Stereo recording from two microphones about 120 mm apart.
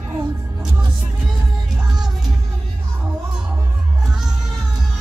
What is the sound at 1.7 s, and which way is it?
Music, 5° right (ahead or behind).